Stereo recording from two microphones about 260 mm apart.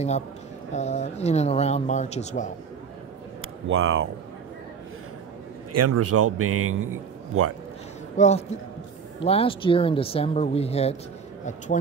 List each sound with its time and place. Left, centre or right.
0.7 s speech: left
3.6 s speech: right
5.7 s a man's voice: right
8.2 s speech: left